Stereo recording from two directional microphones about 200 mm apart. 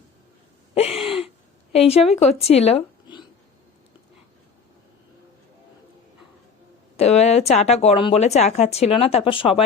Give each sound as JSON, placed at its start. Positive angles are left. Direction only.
{"t": 0.7, "sound": "a sound", "side_deg": 30}
{"t": 1.7, "sound": "a woman's voice", "side_deg": 30}
{"t": 6.9, "sound": "a woman's voice", "side_deg": 30}